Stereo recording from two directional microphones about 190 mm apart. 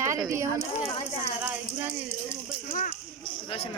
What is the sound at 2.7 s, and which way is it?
Speech, 45° left (ahead or behind).